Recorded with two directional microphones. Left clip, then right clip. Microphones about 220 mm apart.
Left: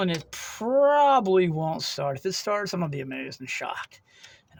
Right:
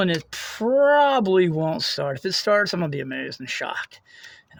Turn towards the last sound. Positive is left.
turn(degrees=-35)  # may be behind; listen again after turning